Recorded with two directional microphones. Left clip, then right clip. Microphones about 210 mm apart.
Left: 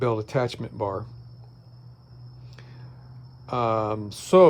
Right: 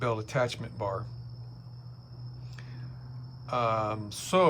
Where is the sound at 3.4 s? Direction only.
25° left (ahead or behind).